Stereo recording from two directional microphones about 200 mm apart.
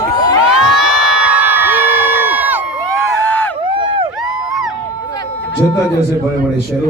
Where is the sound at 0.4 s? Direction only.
5° right (ahead or behind).